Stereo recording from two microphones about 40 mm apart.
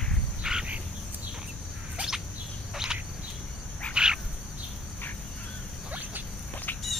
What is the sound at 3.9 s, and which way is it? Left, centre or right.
Frog, centre.